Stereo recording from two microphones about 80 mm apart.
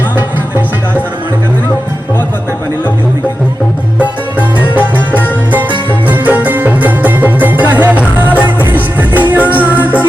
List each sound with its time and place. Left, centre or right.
4.4 s music: right
6.1 s music: centre